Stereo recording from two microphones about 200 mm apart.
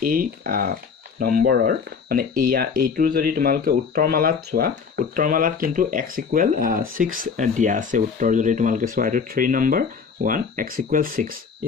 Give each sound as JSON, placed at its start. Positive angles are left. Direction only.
{"t": 0.0, "sound": "speech", "side_deg": -45}